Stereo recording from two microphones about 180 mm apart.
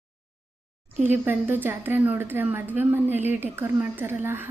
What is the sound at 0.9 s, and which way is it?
A woman's voice, 10° right (ahead or behind).